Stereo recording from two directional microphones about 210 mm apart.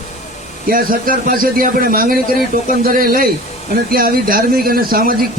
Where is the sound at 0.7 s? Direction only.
40° right (ahead or behind).